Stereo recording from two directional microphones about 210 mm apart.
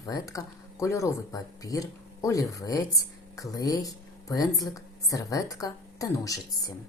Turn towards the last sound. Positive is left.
turn(degrees=15)  # may be behind; listen again after turning